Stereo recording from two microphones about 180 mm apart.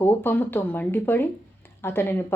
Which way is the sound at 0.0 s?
10° left (ahead or behind).